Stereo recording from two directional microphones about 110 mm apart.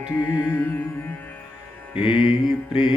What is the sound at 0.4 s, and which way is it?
Music, 20° left (ahead or behind).